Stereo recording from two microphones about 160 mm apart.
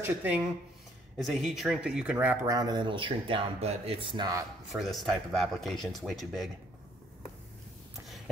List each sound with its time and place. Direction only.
0.0 s speech: 10° right (ahead or behind)
2.5 s speech: 25° right (ahead or behind)
4.7 s speech: centre (ahead or behind)